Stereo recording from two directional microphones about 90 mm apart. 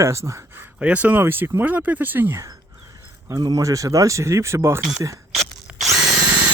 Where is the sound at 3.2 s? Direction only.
45° right (ahead or behind).